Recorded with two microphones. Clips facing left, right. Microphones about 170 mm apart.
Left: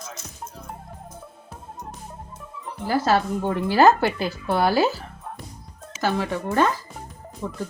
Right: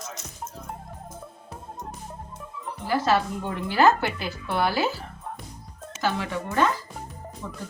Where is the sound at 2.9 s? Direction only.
40° left (ahead or behind).